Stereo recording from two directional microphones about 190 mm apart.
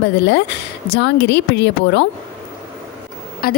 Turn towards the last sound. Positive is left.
turn(degrees=50)  # may be behind; listen again after turning